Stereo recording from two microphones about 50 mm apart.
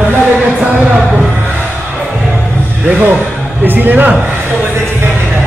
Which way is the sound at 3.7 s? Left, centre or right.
Right.